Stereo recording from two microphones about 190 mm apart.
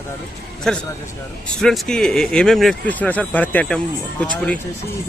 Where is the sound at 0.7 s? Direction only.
5° left (ahead or behind).